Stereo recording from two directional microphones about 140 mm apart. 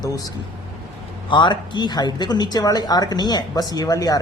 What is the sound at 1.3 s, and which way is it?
A woman's voice, 35° left (ahead or behind).